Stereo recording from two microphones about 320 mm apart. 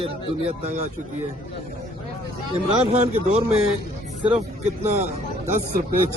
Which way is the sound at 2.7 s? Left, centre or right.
Centre.